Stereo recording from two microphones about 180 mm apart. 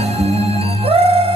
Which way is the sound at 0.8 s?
30° right (ahead or behind).